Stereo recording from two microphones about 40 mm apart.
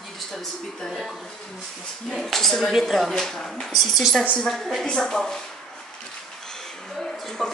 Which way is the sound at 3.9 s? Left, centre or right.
Centre.